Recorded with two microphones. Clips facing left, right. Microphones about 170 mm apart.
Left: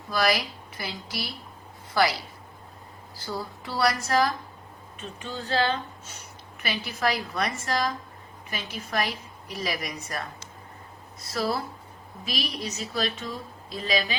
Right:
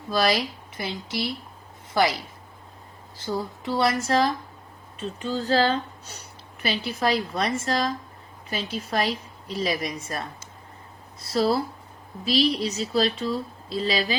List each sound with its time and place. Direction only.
0.1 s a woman's voice: 30° right (ahead or behind)